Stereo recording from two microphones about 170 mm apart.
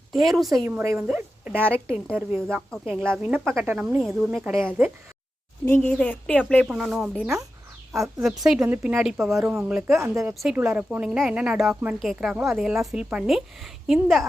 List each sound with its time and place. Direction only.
0.1 s speech: centre (ahead or behind)
5.6 s speech: 10° left (ahead or behind); by 10.0 s 5° right (ahead or behind)
10.0 s speech: 15° right (ahead or behind)
10.3 s speech: 5° right (ahead or behind)